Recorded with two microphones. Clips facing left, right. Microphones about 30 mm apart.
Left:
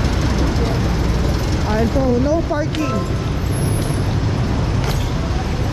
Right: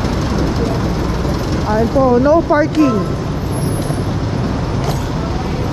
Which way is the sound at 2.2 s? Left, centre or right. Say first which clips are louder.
Right 7 dB; right.